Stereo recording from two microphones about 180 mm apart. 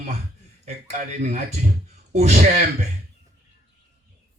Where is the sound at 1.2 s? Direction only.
40° right (ahead or behind).